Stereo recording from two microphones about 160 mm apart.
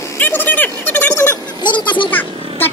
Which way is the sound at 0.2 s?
10° left (ahead or behind).